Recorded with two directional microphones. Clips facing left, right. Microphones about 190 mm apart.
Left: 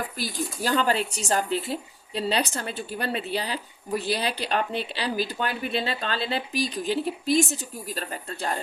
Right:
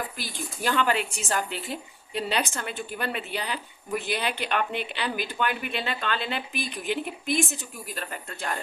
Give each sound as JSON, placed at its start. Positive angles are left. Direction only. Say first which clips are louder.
{"t": 0.2, "sound": "speech", "louder": "left 4 dB", "side_deg": 40}